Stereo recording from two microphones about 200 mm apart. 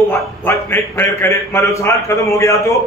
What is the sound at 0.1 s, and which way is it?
A man's voice, 10° left (ahead or behind).